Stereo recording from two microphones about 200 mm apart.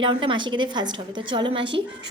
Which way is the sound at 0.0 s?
25° right (ahead or behind).